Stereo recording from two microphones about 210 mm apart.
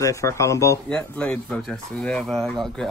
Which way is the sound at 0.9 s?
5° left (ahead or behind).